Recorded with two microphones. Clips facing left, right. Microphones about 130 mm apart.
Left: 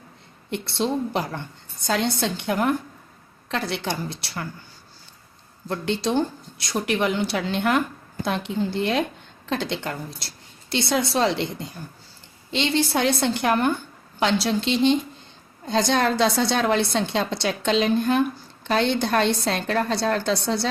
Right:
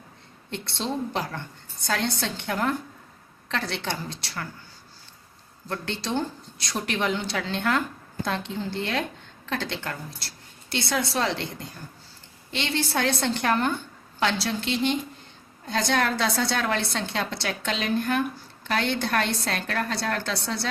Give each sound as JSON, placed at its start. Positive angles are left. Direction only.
{"t": 0.5, "sound": "a woman's voice", "side_deg": 15}
{"t": 5.6, "sound": "a woman's voice", "side_deg": 15}
{"t": 6.6, "sound": "a woman's voice", "side_deg": 5}